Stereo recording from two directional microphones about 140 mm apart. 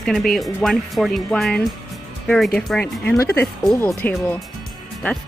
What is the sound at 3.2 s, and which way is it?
Speech, 20° left (ahead or behind).